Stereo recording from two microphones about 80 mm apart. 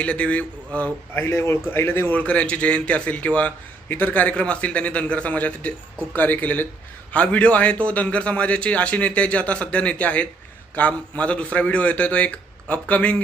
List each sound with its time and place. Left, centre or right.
0.0 s a man's voice: centre
1.1 s a man's voice: left
2.2 s a man's voice: centre